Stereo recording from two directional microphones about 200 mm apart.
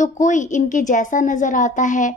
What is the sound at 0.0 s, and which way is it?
A woman's voice, 40° left (ahead or behind).